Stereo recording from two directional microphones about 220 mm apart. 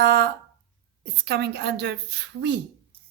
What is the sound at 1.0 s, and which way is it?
A woman's voice, 50° right (ahead or behind).